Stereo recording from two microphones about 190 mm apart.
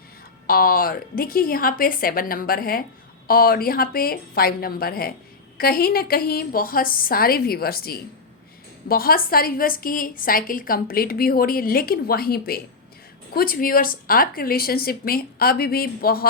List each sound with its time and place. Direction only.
0.4 s a woman's voice: 50° left (ahead or behind)